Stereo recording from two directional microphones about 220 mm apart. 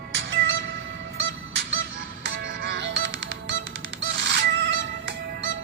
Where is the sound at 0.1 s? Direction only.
60° right (ahead or behind).